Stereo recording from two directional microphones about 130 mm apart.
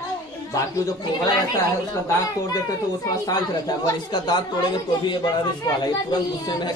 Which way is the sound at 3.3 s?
30° left (ahead or behind).